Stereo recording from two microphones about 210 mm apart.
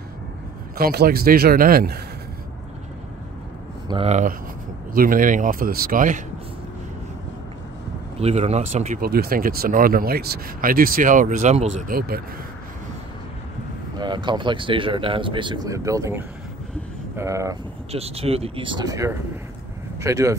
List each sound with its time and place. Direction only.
0.7 s speech: 45° right (ahead or behind)
3.9 s speech: 30° right (ahead or behind)
8.2 s speech: 30° right (ahead or behind)
13.9 s speech: 20° right (ahead or behind)
17.9 s speech: 30° right (ahead or behind)